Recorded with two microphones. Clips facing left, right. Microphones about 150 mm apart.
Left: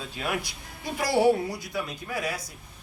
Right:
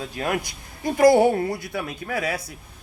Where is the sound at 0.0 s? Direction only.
50° right (ahead or behind).